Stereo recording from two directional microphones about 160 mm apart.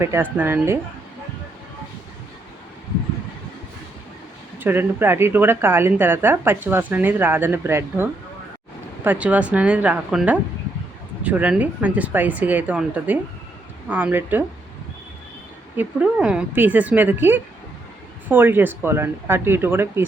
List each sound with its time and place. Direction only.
0.0 s a woman's voice: 15° right (ahead or behind)
4.6 s a woman's voice: 15° right (ahead or behind)
15.8 s a woman's voice: 5° right (ahead or behind)